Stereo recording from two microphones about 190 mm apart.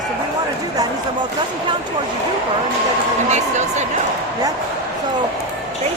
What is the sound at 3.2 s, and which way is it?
Speech, 35° right (ahead or behind).